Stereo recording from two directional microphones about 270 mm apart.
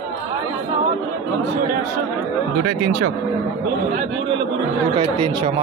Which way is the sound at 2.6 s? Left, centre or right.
Right.